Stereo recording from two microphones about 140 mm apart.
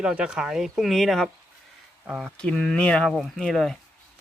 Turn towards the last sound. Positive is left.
turn(degrees=0)  # may be behind; listen again after turning